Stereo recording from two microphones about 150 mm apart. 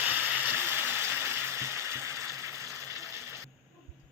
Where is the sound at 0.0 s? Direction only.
15° right (ahead or behind).